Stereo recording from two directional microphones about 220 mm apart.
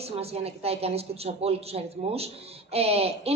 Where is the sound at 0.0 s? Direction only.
25° right (ahead or behind).